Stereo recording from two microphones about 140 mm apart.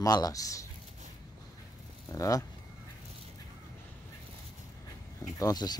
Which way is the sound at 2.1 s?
25° left (ahead or behind).